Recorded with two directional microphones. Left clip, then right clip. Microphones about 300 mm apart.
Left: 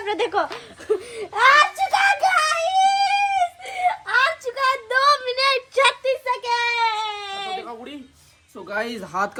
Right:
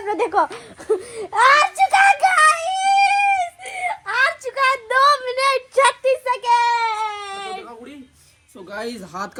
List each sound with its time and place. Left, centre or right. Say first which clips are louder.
0.0 s speech: right 3 dB; centre
0.9 s a sound: right 2 dB; right
2.3 s music: right 4 dB; right
3.1 s whimper: right 2 dB; centre
4.4 s child singing: right 3 dB; right
8.7 s speech: left 3 dB; centre